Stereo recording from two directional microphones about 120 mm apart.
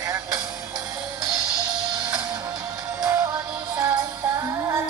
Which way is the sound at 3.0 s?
25° right (ahead or behind).